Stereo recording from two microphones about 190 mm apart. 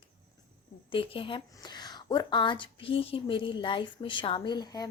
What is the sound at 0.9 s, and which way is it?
A woman's voice, 30° left (ahead or behind).